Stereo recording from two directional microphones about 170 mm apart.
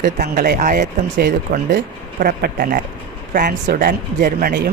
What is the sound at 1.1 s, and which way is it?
Speech, 75° right (ahead or behind).